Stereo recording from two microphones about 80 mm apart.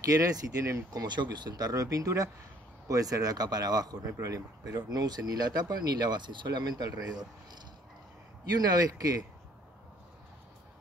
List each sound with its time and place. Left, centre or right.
0.1 s speech: right
1.0 s speech: right
8.5 s speech: right